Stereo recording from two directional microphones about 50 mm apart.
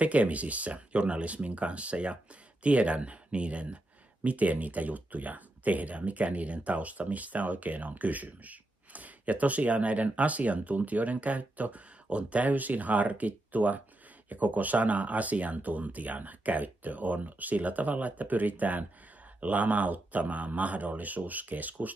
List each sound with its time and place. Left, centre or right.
0.0 s speech: right